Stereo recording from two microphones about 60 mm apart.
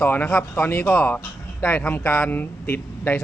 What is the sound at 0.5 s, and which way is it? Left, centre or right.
Speech, left.